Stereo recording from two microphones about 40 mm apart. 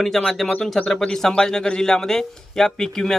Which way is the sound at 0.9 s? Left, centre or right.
Centre.